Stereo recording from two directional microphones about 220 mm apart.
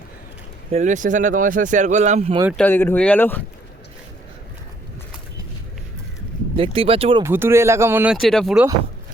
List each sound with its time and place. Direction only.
0.7 s speech: 35° right (ahead or behind)
2.6 s speech: 10° left (ahead or behind)
6.6 s speech: 25° right (ahead or behind)
7.2 s speech: 10° right (ahead or behind)